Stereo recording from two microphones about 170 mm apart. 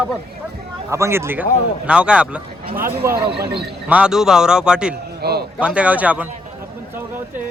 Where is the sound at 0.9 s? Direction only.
15° right (ahead or behind).